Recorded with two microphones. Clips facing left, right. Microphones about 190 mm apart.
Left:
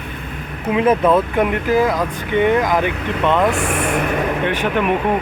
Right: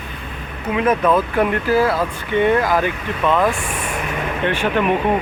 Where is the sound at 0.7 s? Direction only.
25° left (ahead or behind).